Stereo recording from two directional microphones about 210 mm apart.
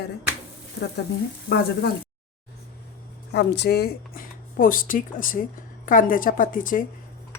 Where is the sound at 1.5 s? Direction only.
50° left (ahead or behind).